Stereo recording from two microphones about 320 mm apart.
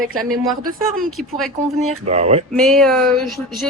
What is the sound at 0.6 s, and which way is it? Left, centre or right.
Speech, right.